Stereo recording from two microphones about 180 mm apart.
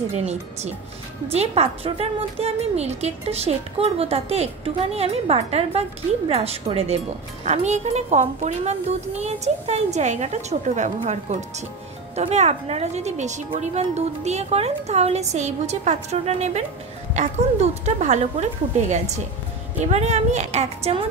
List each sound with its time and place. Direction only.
0.1 s a woman's voice: 35° right (ahead or behind)